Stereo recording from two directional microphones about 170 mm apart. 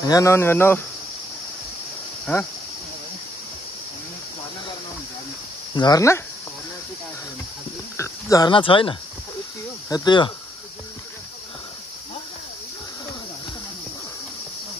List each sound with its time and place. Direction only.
0.0 s speech: 20° left (ahead or behind)
2.3 s speech: 10° left (ahead or behind)
5.8 s speech: 20° left (ahead or behind)
8.0 s speech: 20° left (ahead or behind)